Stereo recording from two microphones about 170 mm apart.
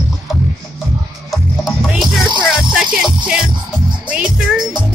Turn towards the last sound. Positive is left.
turn(degrees=-5)  # may be behind; listen again after turning